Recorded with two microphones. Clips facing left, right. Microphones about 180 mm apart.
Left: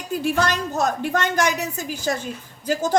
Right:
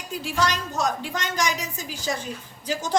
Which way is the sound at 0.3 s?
60° left (ahead or behind).